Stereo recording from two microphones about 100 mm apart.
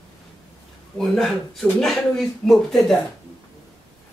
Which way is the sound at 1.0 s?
5° left (ahead or behind).